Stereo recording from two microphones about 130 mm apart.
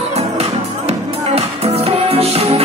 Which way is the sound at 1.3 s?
50° right (ahead or behind).